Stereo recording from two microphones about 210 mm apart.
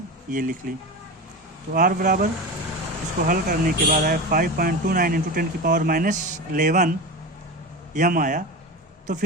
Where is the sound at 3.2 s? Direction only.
40° right (ahead or behind).